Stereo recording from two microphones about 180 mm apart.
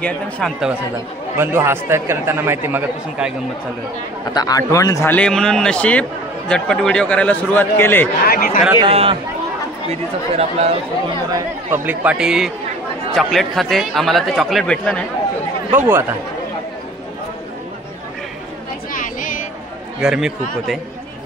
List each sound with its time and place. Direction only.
0.0 s a man's voice: centre (ahead or behind)
1.4 s speech: 15° right (ahead or behind)
4.3 s a man's voice: 20° left (ahead or behind)
8.3 s speech: 55° left (ahead or behind)
8.8 s speech: 30° right (ahead or behind)
11.3 s a man's voice: 10° right (ahead or behind); by 15.0 s 5° left (ahead or behind)
15.7 s speech: 15° right (ahead or behind)
18.9 s a sound: 45° left (ahead or behind)
20.0 s a man's voice: 5° right (ahead or behind)